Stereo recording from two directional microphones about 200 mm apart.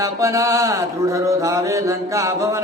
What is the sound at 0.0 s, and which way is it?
Mantra, 15° right (ahead or behind).